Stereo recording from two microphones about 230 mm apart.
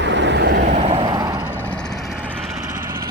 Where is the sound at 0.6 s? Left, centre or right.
Right.